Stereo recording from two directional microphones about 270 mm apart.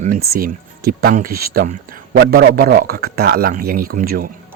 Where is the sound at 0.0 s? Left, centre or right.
Right.